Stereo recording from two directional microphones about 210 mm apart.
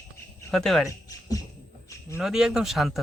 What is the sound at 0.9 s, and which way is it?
Speech, 15° left (ahead or behind).